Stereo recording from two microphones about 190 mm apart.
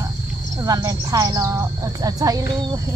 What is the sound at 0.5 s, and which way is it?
Speech, 20° right (ahead or behind).